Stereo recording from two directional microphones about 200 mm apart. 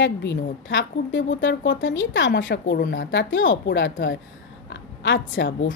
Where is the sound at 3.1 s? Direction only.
65° left (ahead or behind).